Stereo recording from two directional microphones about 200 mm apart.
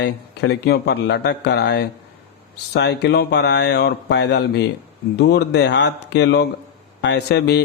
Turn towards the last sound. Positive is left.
turn(degrees=60)  # may be behind; listen again after turning